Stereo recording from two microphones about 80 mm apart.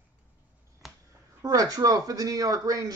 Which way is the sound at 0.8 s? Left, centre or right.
Centre.